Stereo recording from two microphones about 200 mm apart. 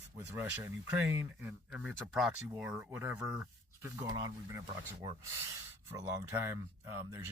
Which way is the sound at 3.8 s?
20° right (ahead or behind).